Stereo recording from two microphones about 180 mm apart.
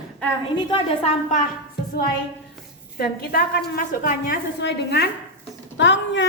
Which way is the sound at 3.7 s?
50° left (ahead or behind).